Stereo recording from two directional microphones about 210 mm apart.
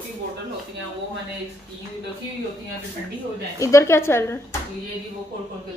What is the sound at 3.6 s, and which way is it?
Speech, 15° left (ahead or behind).